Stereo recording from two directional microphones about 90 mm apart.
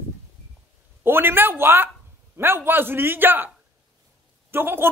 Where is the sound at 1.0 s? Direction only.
25° right (ahead or behind).